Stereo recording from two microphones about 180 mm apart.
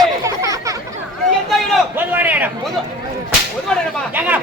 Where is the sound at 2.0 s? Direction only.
10° right (ahead or behind).